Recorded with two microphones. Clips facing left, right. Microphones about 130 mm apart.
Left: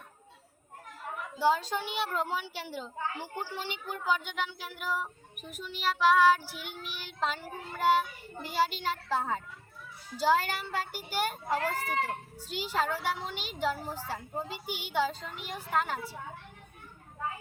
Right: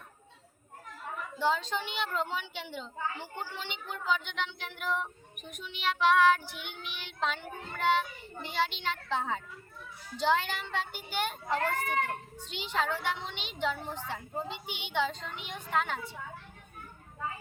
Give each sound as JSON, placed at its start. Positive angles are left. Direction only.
{"t": 1.4, "sound": "a woman's voice", "side_deg": 10}
{"t": 3.7, "sound": "speech", "side_deg": 45}
{"t": 4.0, "sound": "child singing", "side_deg": 5}
{"t": 10.2, "sound": "a woman's voice", "side_deg": 5}
{"t": 12.5, "sound": "child singing", "side_deg": 5}